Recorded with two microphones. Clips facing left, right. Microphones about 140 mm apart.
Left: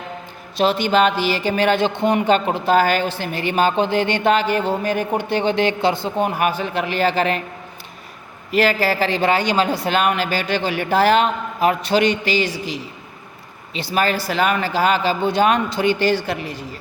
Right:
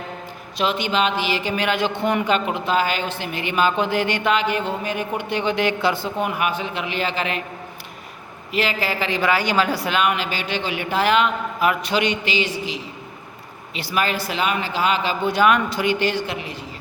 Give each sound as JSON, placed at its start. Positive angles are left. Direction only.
{"t": 0.5, "sound": "speech", "side_deg": 35}
{"t": 8.5, "sound": "speech", "side_deg": 40}
{"t": 9.9, "sound": "speech", "side_deg": 40}
{"t": 13.7, "sound": "speech", "side_deg": 25}
{"t": 14.0, "sound": "a man's voice", "side_deg": 40}